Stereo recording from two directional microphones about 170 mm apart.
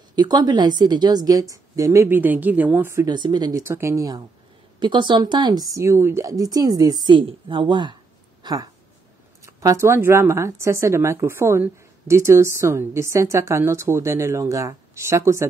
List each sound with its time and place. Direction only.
0.1 s speech: 25° right (ahead or behind)
3.1 s speech: 25° right (ahead or behind)
3.6 s speech: 15° right (ahead or behind)